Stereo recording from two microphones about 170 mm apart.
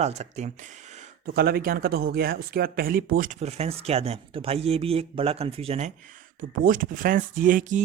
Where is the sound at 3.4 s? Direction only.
40° right (ahead or behind).